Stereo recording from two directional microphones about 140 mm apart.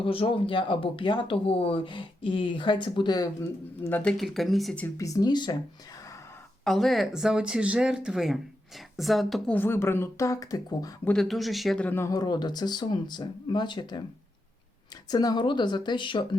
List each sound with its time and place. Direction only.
0.0 s speech: 40° left (ahead or behind)
3.8 s speech: 15° left (ahead or behind)
4.2 s speech: centre (ahead or behind)
4.9 s speech: 25° left (ahead or behind)
6.7 s speech: centre (ahead or behind)
9.6 s speech: 15° left (ahead or behind)
11.0 s speech: 5° left (ahead or behind)
11.9 s speech: 20° left (ahead or behind)
15.1 s speech: 25° left (ahead or behind)